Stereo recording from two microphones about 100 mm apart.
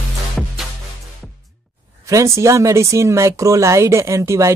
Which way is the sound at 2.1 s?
30° right (ahead or behind).